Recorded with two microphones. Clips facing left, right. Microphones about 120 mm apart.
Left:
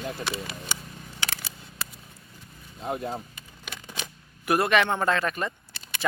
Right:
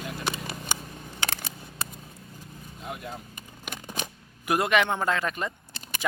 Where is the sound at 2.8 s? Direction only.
35° left (ahead or behind).